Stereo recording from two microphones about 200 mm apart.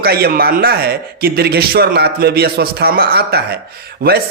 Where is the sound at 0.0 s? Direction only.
50° right (ahead or behind).